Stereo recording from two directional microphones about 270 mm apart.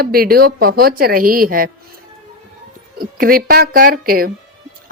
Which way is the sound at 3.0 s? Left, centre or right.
Right.